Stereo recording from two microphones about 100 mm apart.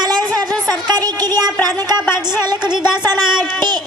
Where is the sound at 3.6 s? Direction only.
45° right (ahead or behind).